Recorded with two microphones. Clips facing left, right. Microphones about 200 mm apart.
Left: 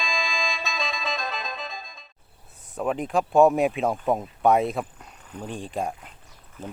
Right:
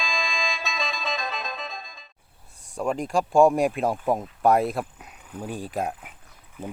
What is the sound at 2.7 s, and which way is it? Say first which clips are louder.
Speech: even; centre (ahead or behind).